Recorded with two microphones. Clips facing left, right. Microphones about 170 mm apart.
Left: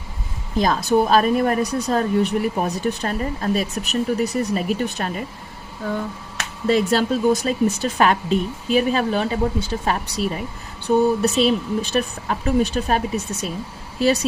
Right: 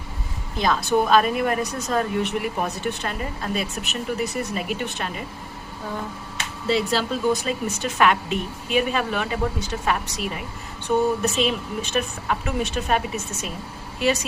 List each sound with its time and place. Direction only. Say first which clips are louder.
0.6 s speech: left 3 dB; 40° left (ahead or behind)
6.7 s speech: left 4 dB; 50° left (ahead or behind)
7.4 s speech: left 6 dB; 35° left (ahead or behind)